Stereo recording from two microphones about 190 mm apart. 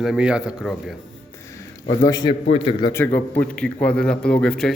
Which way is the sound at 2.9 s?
15° left (ahead or behind).